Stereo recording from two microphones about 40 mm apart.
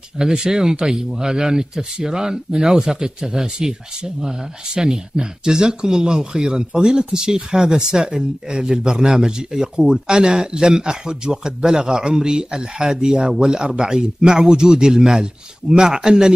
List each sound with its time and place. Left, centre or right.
0.2 s a man's voice: centre